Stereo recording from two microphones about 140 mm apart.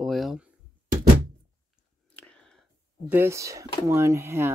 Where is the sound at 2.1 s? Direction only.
5° left (ahead or behind).